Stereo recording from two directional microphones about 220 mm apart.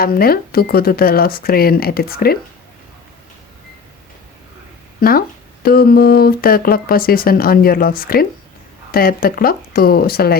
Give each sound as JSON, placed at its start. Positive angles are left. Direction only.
{"t": 0.0, "sound": "speech", "side_deg": 40}
{"t": 4.9, "sound": "speech", "side_deg": 40}